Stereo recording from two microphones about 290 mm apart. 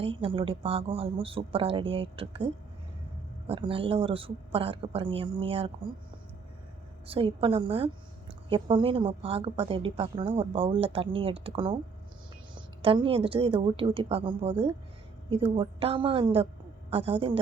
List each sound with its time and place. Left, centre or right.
0.0 s a woman's voice: centre
7.1 s a woman's voice: centre